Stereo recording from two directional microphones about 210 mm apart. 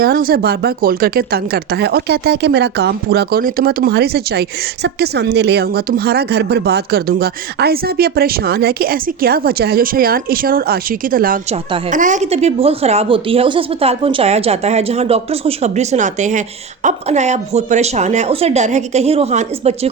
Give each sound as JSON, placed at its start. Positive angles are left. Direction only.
{"t": 0.0, "sound": "speech", "side_deg": -45}